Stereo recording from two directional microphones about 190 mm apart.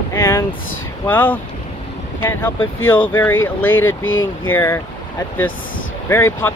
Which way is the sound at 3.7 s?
90° left.